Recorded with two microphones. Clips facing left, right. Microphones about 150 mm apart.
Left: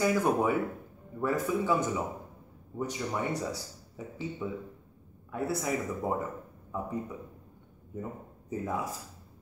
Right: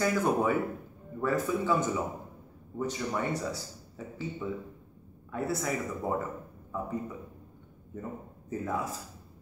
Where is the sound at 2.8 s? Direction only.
15° left (ahead or behind).